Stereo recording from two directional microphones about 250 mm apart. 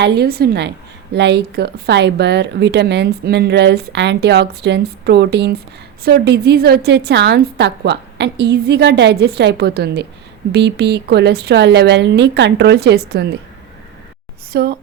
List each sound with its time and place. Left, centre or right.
0.0 s a woman's voice: right
14.5 s a woman's voice: right